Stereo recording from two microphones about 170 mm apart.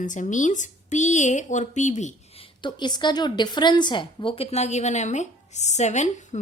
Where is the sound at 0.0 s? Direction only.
50° left (ahead or behind).